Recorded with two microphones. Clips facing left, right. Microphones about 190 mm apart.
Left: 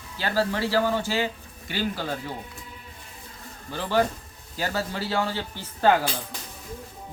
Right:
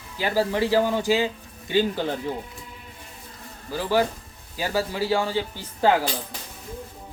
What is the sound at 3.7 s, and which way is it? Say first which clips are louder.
Speech: right 1 dB; 10° right (ahead or behind).